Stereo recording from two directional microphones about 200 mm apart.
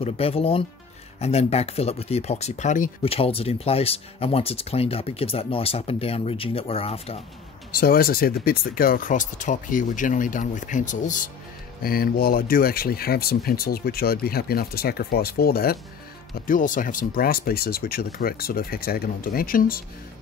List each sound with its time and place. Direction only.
0.0 s speech: 30° left (ahead or behind)
7.7 s speech: 45° left (ahead or behind)